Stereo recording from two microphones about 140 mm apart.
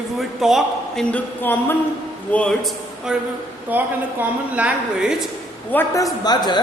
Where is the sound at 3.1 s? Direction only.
5° right (ahead or behind).